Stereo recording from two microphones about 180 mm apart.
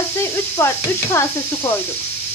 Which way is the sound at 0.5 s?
15° left (ahead or behind).